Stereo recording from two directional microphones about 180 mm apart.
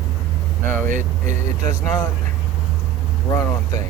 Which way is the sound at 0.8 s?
45° right (ahead or behind).